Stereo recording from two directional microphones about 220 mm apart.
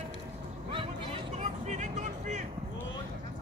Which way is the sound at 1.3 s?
30° right (ahead or behind).